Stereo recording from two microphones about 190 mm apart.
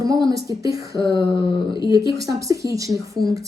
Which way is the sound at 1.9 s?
20° right (ahead or behind).